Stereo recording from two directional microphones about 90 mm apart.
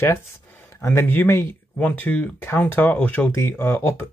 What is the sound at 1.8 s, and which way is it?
Speech, 15° left (ahead or behind).